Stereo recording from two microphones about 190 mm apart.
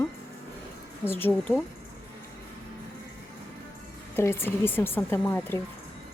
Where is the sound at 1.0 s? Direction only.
10° left (ahead or behind).